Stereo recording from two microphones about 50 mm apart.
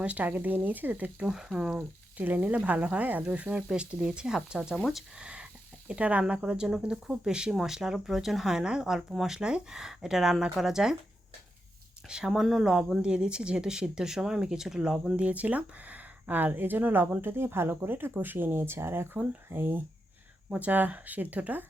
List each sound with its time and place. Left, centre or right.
0.0 s speech: right
1.2 s speech: centre
2.1 s speech: right
4.6 s speech: centre
5.1 s speech: centre
12.0 s speech: centre
15.1 s speech: right
20.5 s speech: right